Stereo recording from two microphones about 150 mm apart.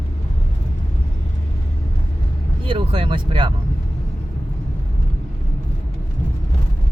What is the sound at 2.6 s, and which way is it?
Speech, 35° right (ahead or behind).